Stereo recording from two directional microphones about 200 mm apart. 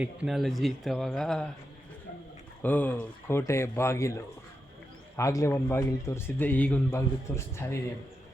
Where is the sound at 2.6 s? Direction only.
10° left (ahead or behind).